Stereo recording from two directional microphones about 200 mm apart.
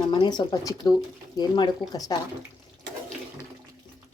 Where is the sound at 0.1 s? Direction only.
20° left (ahead or behind).